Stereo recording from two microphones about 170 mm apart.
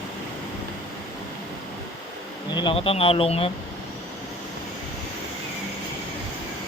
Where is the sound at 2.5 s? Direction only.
30° left (ahead or behind).